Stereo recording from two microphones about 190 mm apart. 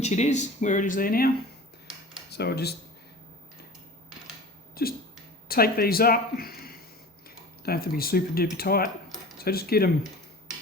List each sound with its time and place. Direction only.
0.0 s speech: 35° left (ahead or behind)
2.3 s speech: 60° left (ahead or behind)
4.7 s a sound: 50° left (ahead or behind)
5.5 s speech: 55° left (ahead or behind)